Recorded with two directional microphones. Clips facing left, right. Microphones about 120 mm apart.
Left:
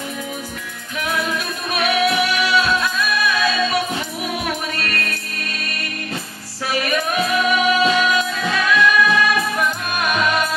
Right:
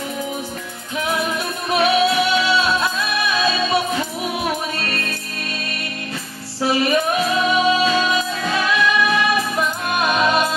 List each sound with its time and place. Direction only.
1.7 s music: 25° right (ahead or behind)
6.6 s music: 25° right (ahead or behind)